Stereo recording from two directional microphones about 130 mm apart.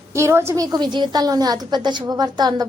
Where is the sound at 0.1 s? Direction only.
20° right (ahead or behind).